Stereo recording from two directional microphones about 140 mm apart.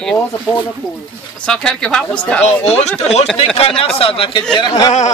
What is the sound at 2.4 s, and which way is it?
Speech, 50° left (ahead or behind).